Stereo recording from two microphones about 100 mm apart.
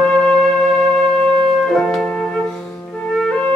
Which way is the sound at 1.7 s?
5° left (ahead or behind).